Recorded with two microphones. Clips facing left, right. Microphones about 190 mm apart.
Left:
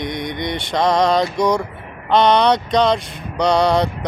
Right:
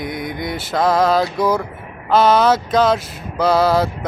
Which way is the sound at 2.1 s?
5° right (ahead or behind).